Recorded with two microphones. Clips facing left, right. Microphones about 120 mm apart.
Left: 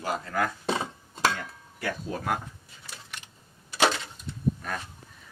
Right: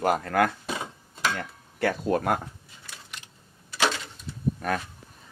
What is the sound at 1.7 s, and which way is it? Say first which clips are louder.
Speech: right 8 dB; 70° right (ahead or behind).